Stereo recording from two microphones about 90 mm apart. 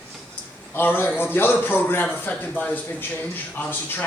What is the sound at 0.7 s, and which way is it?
A man's voice, 25° left (ahead or behind).